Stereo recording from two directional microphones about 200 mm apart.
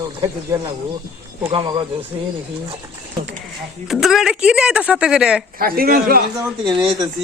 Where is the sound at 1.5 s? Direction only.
25° right (ahead or behind).